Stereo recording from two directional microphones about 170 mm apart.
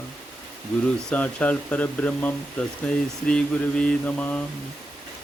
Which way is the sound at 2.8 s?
5° left (ahead or behind).